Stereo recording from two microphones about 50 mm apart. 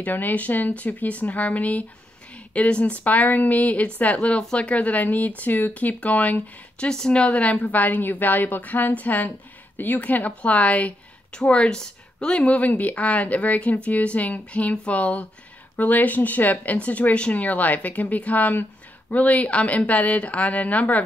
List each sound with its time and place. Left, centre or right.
0.0 s a woman's voice: left
6.9 s a woman's voice: centre